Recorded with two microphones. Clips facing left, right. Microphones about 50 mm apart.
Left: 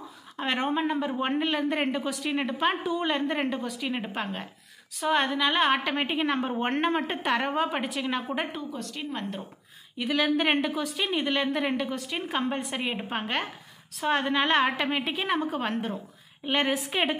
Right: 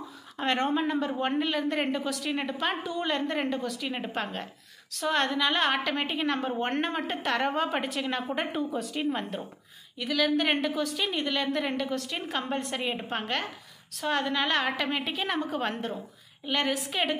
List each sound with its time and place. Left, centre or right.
0.4 s a woman's voice: centre
8.5 s a woman's voice: centre
9.9 s a woman's voice: centre
16.4 s a woman's voice: left